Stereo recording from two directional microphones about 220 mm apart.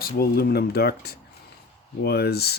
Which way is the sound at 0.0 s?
45° left (ahead or behind).